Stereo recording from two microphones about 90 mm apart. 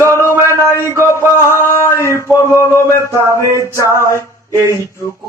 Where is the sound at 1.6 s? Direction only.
30° left (ahead or behind).